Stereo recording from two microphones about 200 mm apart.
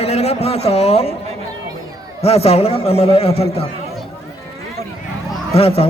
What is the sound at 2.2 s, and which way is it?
A man's voice, 30° left (ahead or behind).